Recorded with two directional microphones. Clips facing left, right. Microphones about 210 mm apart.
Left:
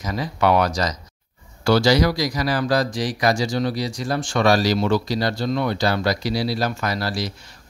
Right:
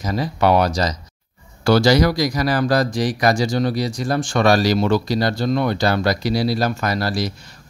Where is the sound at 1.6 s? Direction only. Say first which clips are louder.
Right 2 dB; 45° right (ahead or behind).